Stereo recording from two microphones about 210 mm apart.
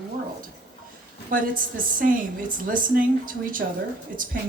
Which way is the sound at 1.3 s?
40° right (ahead or behind).